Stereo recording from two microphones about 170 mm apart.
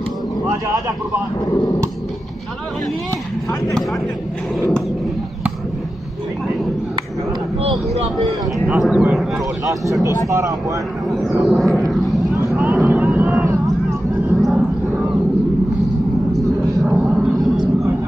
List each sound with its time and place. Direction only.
8.6 s speech: 5° right (ahead or behind)
10.0 s speech: 20° right (ahead or behind)
11.3 s speech: centre (ahead or behind)
11.9 s vehicle: centre (ahead or behind)
13.7 s a sound: centre (ahead or behind)
16.9 s a sound: centre (ahead or behind)